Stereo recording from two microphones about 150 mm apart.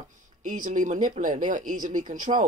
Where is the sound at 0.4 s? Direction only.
60° right (ahead or behind).